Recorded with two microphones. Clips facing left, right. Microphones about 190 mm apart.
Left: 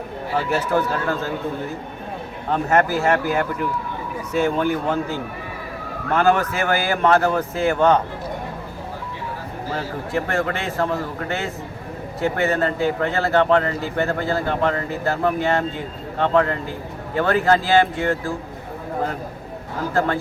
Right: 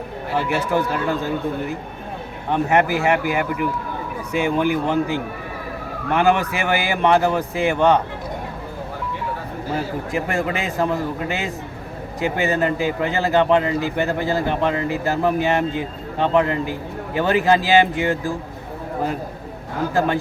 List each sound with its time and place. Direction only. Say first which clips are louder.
0.7 s speech: right 1 dB; 15° right (ahead or behind)
2.5 s speech: right 1 dB; 15° right (ahead or behind)
9.7 s speech: right 1 dB; 15° right (ahead or behind)